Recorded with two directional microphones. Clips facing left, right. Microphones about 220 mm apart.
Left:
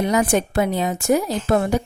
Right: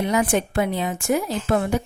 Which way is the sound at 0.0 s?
40° left (ahead or behind).